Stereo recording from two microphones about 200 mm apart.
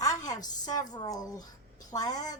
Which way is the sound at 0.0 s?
20° left (ahead or behind).